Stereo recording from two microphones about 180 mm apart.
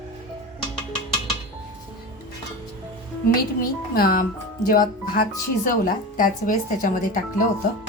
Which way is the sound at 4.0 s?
55° left (ahead or behind).